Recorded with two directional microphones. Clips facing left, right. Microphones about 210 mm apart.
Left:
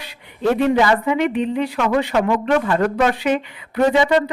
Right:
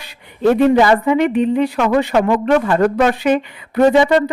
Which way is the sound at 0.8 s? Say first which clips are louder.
Right 4 dB; 40° right (ahead or behind).